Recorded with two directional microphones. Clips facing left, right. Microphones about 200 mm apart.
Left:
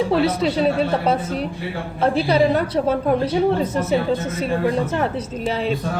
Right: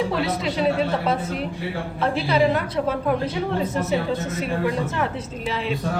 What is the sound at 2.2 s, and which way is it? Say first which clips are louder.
Speech: left 2 dB; 40° left (ahead or behind).